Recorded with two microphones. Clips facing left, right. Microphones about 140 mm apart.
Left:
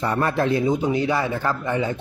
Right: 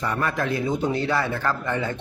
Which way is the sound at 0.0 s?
30° left (ahead or behind).